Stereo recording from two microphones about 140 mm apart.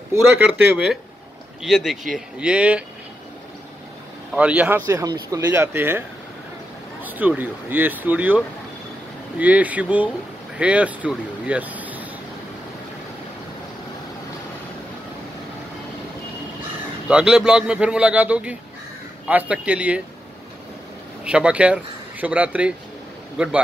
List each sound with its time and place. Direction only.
0.5 s speech: centre (ahead or behind)
4.3 s speech: 10° right (ahead or behind)
9.4 s speech: 10° right (ahead or behind)
17.1 s speech: 5° right (ahead or behind)
21.2 s speech: 5° right (ahead or behind)